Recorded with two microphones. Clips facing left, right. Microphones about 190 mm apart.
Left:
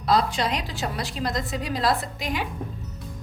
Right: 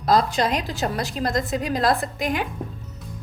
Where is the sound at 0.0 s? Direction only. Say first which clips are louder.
Right 3 dB; 45° right (ahead or behind).